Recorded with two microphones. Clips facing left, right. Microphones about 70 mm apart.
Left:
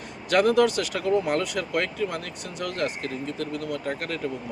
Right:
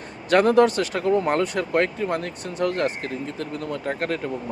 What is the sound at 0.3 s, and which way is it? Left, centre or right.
Speech, right.